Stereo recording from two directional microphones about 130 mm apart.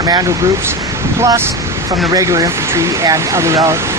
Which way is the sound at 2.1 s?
25° right (ahead or behind).